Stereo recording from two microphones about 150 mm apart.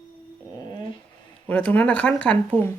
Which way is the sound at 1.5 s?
10° left (ahead or behind).